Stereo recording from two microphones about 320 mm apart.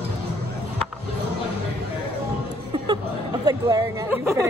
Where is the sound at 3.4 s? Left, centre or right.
Centre.